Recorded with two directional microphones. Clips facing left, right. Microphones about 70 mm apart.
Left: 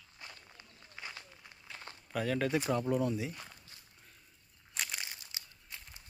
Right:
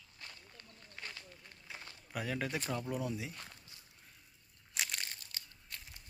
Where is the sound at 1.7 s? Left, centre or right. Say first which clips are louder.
Left 2 dB; centre.